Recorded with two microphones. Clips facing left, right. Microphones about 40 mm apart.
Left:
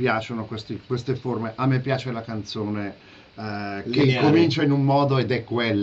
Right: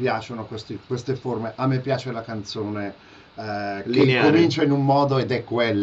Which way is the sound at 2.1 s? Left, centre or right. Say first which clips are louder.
Even; centre.